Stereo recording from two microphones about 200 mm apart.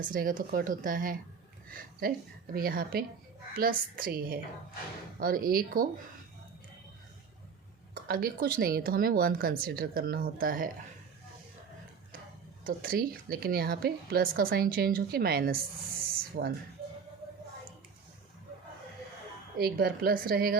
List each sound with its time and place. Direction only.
0.0 s a woman's voice: 45° right (ahead or behind)
8.0 s a woman's voice: 45° right (ahead or behind)
12.6 s a woman's voice: 45° right (ahead or behind)
19.5 s a woman's voice: 50° right (ahead or behind)